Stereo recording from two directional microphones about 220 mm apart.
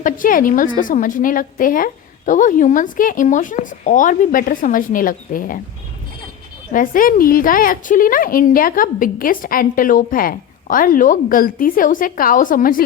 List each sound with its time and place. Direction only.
0.0 s a woman's voice: 40° left (ahead or behind)
6.7 s a woman's voice: 40° left (ahead or behind)